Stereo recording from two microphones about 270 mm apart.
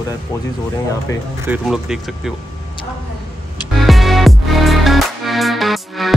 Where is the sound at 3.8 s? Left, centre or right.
Centre.